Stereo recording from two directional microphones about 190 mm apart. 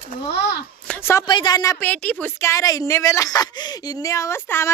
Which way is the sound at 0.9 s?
15° left (ahead or behind).